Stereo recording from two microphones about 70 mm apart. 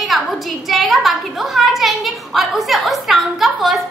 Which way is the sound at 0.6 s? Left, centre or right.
Centre.